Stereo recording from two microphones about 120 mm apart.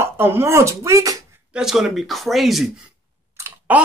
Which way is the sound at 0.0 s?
20° right (ahead or behind).